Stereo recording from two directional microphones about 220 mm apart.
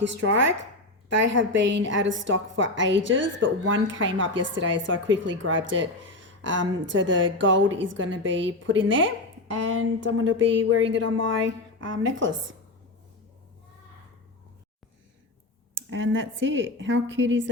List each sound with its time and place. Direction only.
1.1 s a woman's voice: 55° right (ahead or behind)
15.7 s a woman's voice: 55° right (ahead or behind)